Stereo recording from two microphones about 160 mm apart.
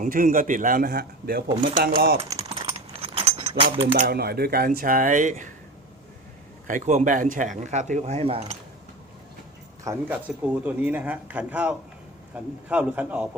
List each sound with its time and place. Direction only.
0.0 s a man's voice: 55° right (ahead or behind)
2.9 s keys jangling: 35° right (ahead or behind)
4.0 s speech: 80° right; by 5.5 s 55° right (ahead or behind)
6.7 s speech: 50° right (ahead or behind)
9.8 s speech: 15° right (ahead or behind)